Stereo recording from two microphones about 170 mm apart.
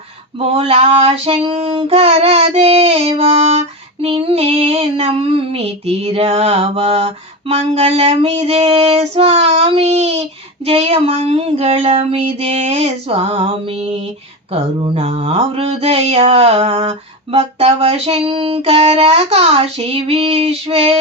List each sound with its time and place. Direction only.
0.3 s female singing: 35° right (ahead or behind)